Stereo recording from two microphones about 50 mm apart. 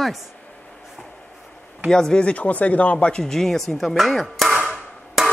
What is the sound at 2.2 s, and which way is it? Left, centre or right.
Speech, left.